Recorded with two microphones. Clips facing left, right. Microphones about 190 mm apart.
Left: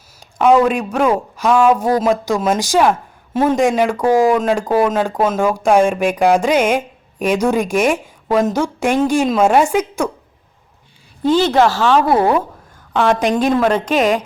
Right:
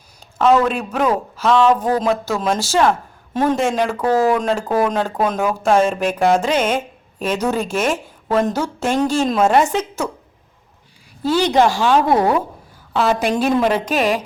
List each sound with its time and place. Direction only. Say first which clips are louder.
0.3 s speech: left 3 dB; 10° left (ahead or behind)
11.3 s a woman's voice: left 2 dB; 15° right (ahead or behind)